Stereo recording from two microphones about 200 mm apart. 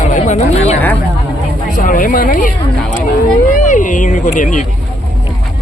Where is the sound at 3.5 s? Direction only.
40° left (ahead or behind).